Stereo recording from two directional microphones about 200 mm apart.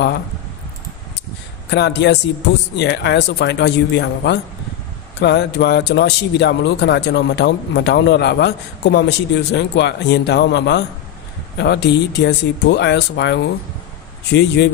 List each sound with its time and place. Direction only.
1.7 s speech: 60° left (ahead or behind)